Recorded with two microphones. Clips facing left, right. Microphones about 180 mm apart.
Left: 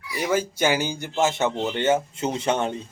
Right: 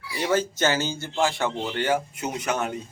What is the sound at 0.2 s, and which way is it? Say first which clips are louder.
A man's voice: even; 10° left (ahead or behind).